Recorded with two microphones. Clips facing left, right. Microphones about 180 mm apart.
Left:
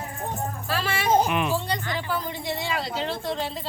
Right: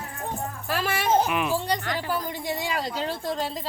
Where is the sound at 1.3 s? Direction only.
5° right (ahead or behind).